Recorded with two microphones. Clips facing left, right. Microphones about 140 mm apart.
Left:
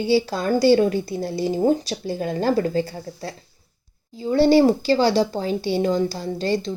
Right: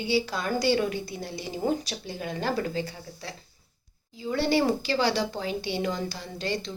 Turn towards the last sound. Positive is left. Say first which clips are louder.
# left 8 dB
turn(degrees=35)  # may be behind; listen again after turning